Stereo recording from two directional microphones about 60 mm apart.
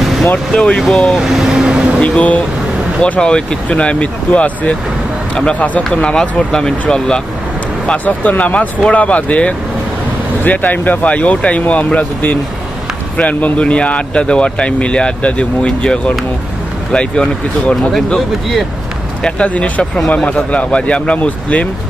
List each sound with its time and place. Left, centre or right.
0.0 s vehicle: centre
0.5 s speech: centre
1.1 s vehicle: centre
2.0 s speech: left
8.0 s speech: left
17.7 s speech: centre
19.2 s speech: left